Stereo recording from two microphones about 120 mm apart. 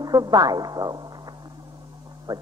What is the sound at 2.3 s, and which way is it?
Speech, 35° right (ahead or behind).